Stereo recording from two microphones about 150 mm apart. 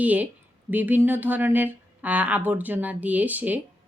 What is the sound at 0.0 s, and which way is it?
Speech, 10° right (ahead or behind).